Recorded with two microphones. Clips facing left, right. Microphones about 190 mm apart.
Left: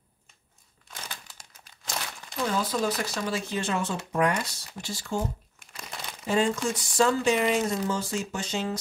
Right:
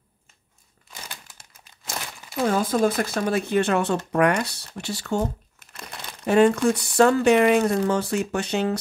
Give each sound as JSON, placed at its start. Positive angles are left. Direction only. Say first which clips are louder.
{"t": 2.4, "sound": "speech", "louder": "right 6 dB", "side_deg": -50}
{"t": 5.6, "sound": "crumpling", "louder": "right 2 dB", "side_deg": 0}
{"t": 6.2, "sound": "speech", "louder": "right 8 dB", "side_deg": -65}